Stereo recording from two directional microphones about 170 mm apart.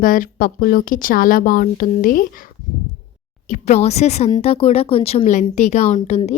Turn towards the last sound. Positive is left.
turn(degrees=40)  # may be behind; listen again after turning